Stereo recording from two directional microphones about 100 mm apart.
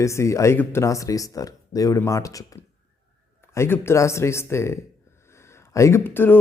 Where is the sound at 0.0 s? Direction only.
30° left (ahead or behind).